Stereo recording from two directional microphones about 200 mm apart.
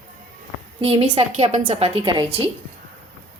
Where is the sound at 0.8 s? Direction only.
30° right (ahead or behind).